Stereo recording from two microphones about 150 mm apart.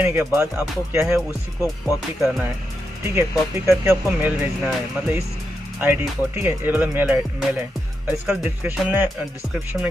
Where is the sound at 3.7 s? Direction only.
15° right (ahead or behind).